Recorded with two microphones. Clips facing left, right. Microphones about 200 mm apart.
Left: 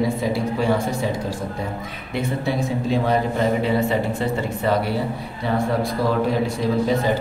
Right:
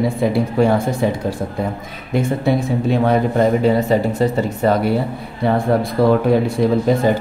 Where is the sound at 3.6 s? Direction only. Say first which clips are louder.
Right 5 dB; 40° right (ahead or behind).